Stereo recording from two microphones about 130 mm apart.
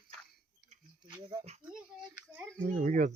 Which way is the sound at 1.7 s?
5° right (ahead or behind).